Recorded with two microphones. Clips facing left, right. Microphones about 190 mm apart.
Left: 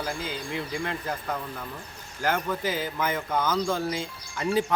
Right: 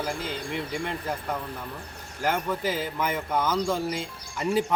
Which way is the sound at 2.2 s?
5° right (ahead or behind).